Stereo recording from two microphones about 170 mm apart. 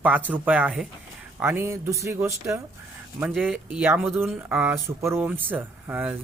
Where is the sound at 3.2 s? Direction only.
5° right (ahead or behind).